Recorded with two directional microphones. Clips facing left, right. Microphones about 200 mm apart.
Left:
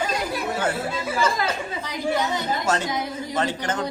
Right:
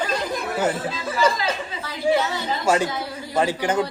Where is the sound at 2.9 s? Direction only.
20° left (ahead or behind).